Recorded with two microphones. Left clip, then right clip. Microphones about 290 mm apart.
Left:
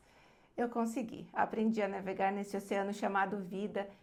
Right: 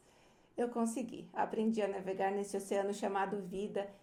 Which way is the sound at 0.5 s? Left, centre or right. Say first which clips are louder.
Left 1 dB; left.